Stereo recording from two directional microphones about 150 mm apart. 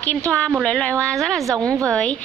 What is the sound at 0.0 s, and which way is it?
A woman's voice, 10° left (ahead or behind).